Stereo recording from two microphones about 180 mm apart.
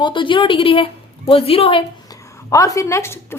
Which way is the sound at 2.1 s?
15° left (ahead or behind).